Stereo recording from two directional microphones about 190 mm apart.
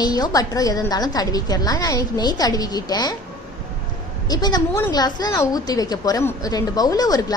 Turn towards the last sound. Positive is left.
turn(degrees=20)  # may be behind; listen again after turning